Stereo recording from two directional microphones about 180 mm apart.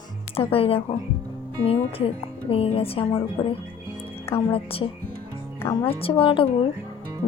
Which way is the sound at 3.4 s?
15° left (ahead or behind).